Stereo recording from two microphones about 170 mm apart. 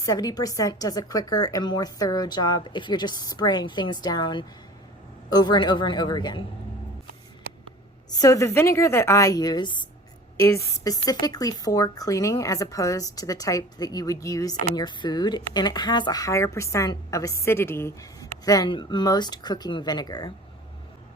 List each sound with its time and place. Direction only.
0.0 s speech: 20° left (ahead or behind)
8.1 s speech: 20° left (ahead or behind)